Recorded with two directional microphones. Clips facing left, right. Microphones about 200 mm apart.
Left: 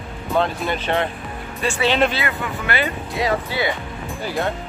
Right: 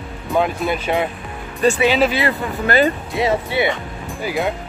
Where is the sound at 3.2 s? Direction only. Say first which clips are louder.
Right 4 dB; 25° right (ahead or behind).